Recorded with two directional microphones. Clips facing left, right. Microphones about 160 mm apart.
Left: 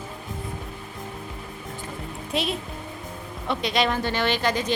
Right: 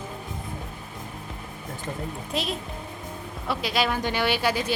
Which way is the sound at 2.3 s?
Centre (ahead or behind).